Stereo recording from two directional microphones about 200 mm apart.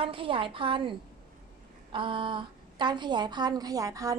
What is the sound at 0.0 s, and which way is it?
A woman's voice, 25° right (ahead or behind).